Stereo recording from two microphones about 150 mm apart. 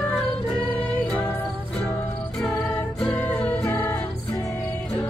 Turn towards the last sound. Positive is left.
turn(degrees=15)  # may be behind; listen again after turning